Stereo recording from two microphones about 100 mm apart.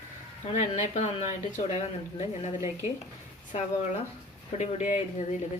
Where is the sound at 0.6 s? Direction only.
90° left.